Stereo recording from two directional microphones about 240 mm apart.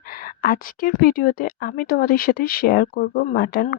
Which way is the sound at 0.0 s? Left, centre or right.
Left.